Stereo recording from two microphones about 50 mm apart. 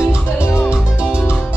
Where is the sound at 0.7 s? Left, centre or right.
Right.